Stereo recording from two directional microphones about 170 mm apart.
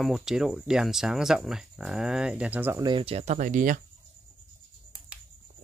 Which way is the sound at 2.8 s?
30° right (ahead or behind).